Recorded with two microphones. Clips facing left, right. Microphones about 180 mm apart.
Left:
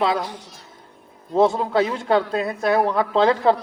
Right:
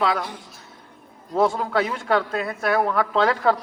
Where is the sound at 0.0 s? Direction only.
25° left (ahead or behind).